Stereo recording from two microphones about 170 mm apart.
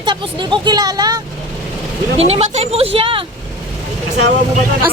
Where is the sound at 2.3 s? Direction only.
40° right (ahead or behind).